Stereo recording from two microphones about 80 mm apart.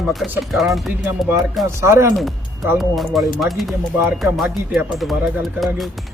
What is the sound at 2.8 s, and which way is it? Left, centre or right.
Speech, centre.